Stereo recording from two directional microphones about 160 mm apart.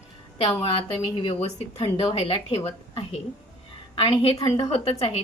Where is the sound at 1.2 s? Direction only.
40° left (ahead or behind).